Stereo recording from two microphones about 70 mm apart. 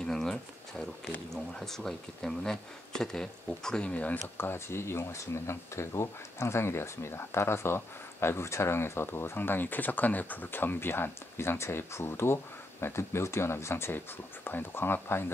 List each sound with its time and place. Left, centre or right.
0.0 s speech: centre
4.4 s speech: left